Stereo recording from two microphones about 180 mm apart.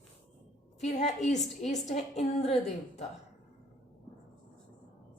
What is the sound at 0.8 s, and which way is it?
A woman's voice, 40° left (ahead or behind).